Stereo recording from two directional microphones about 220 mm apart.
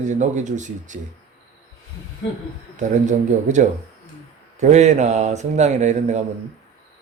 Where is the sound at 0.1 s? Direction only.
35° right (ahead or behind).